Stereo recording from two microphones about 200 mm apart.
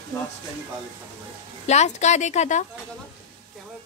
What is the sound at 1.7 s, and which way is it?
Speech, 35° left (ahead or behind).